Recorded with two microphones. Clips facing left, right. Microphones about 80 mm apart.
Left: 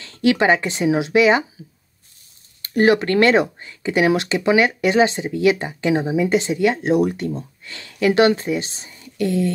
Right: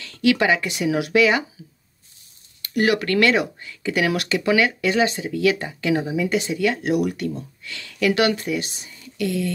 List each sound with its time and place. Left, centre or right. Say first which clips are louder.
0.0 s speech: left 2 dB; left
2.6 s speech: left 5 dB; left